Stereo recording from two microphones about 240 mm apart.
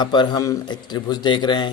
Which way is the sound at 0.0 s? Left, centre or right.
Centre.